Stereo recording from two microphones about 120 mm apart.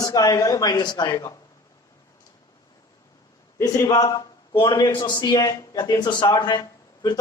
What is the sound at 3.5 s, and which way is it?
A man's voice, 25° left (ahead or behind).